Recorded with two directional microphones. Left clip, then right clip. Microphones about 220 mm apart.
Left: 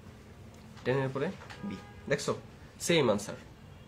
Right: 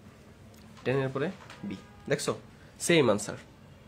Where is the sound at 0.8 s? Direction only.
20° right (ahead or behind).